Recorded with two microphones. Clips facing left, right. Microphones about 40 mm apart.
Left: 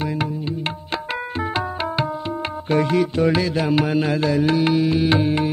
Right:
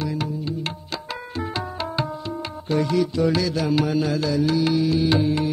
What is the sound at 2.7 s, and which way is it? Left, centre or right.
Music, left.